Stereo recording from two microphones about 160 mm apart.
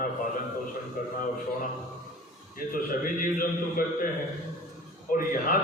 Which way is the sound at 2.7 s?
60° left (ahead or behind).